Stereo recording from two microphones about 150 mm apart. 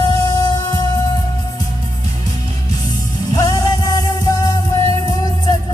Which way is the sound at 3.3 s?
25° left (ahead or behind).